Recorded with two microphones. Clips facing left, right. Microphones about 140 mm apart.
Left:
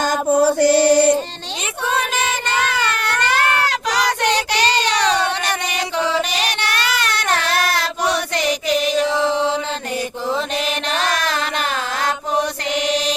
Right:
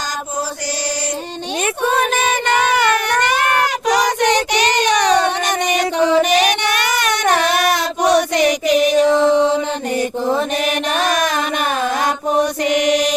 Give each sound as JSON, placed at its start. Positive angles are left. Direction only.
{"t": 0.3, "sound": "chant", "side_deg": 55}
{"t": 3.2, "sound": "a sound", "side_deg": -15}
{"t": 3.8, "sound": "child singing", "side_deg": -15}
{"t": 9.3, "sound": "mantra", "side_deg": -15}
{"t": 10.9, "sound": "child singing", "side_deg": -15}
{"t": 12.6, "sound": "mantra", "side_deg": -15}